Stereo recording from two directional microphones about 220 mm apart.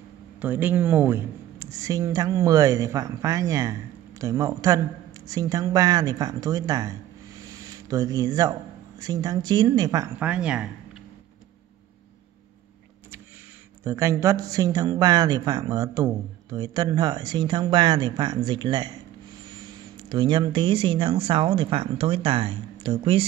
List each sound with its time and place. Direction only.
0.4 s speech: 10° right (ahead or behind)
7.4 s a sound: 15° right (ahead or behind)
9.0 s speech: 15° right (ahead or behind)
13.8 s speech: 15° right (ahead or behind)